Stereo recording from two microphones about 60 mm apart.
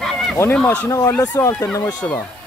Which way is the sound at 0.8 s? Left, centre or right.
Left.